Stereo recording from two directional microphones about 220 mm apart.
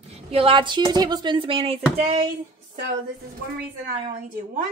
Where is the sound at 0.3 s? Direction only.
25° right (ahead or behind).